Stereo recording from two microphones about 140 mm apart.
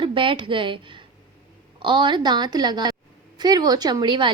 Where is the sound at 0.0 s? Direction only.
40° right (ahead or behind).